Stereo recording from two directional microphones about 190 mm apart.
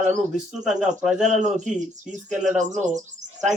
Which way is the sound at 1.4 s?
40° right (ahead or behind).